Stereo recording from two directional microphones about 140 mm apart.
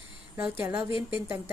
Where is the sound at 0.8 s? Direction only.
40° left (ahead or behind).